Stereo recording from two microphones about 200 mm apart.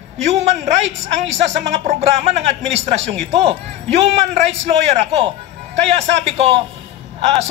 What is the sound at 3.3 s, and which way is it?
A man's voice, 30° right (ahead or behind).